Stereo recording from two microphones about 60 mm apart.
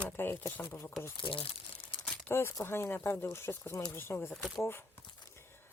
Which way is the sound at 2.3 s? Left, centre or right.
Left.